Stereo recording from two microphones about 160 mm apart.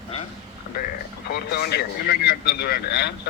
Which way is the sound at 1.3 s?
85° left.